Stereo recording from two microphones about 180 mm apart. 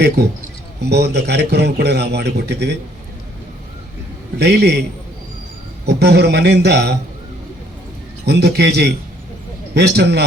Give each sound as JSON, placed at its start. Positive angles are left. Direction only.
{"t": 0.8, "sound": "a man's voice", "side_deg": -65}
{"t": 4.4, "sound": "a man's voice", "side_deg": -65}
{"t": 5.8, "sound": "a man's voice", "side_deg": -65}
{"t": 8.3, "sound": "a man's voice", "side_deg": -65}